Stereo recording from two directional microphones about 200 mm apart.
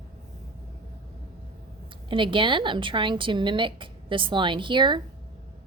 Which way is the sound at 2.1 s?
25° right (ahead or behind).